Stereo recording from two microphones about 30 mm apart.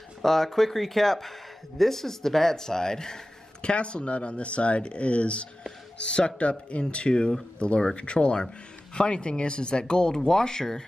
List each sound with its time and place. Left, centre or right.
0.2 s speech: centre
3.6 s speech: left; by 10.8 s centre